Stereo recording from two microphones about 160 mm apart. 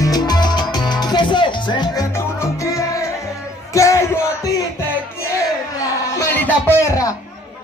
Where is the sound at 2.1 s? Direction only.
15° left (ahead or behind).